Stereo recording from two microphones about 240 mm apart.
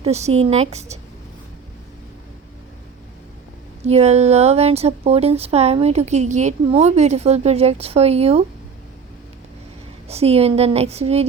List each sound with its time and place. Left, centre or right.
0.0 s speech: right
3.8 s speech: right
10.1 s speech: right